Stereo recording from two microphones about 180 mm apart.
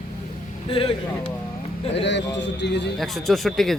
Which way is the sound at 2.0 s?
75° left (ahead or behind).